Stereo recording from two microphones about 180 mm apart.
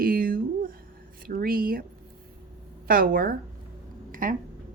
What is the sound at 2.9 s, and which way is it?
Speech, 55° right (ahead or behind).